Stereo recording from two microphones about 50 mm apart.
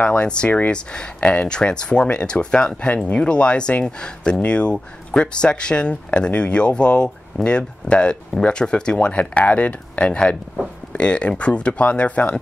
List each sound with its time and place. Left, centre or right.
0.0 s speech: left